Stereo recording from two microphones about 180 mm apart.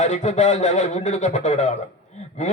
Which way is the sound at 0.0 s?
40° left (ahead or behind).